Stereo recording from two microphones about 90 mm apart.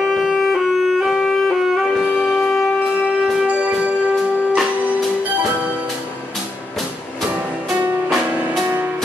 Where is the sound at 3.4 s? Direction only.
15° right (ahead or behind).